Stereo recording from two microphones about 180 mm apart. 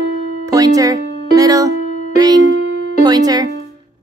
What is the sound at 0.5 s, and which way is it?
Speech, 20° right (ahead or behind).